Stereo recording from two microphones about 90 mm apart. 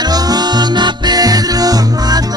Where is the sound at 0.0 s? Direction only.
45° right (ahead or behind).